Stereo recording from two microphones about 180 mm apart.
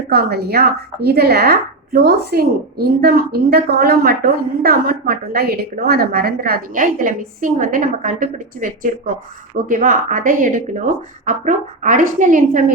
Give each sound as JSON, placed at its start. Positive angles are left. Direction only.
{"t": 0.1, "sound": "a woman's voice", "side_deg": -60}